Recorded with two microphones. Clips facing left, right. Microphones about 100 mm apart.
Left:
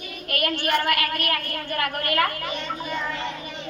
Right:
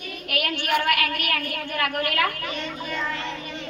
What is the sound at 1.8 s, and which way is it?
Speech, 45° left (ahead or behind).